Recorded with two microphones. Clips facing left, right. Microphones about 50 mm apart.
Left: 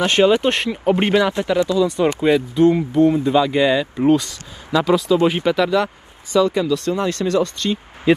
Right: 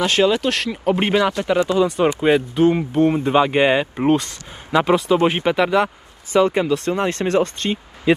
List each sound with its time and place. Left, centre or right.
0.2 s speech: left
0.7 s speech: centre
1.0 s speech: centre
1.5 s speech: right